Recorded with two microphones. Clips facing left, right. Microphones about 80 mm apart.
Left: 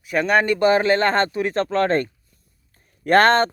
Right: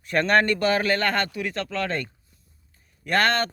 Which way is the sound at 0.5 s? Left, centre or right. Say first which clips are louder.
Left 6 dB; left.